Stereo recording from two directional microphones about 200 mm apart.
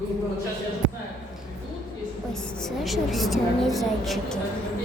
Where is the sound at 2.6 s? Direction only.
Centre (ahead or behind).